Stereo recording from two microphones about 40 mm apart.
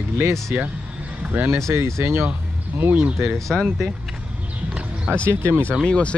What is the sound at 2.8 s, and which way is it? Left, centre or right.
Speech, right.